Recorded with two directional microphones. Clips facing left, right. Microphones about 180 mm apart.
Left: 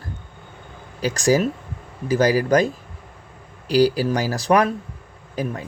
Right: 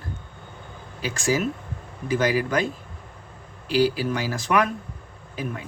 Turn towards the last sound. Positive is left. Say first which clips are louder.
# left 5 dB
turn(degrees=40)  # may be behind; listen again after turning